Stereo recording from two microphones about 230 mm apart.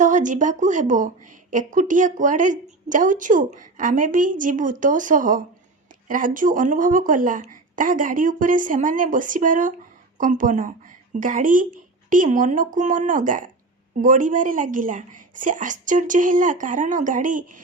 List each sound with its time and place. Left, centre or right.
0.0 s a woman's voice: right